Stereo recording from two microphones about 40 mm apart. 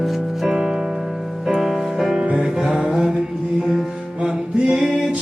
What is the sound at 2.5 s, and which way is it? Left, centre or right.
Music, centre.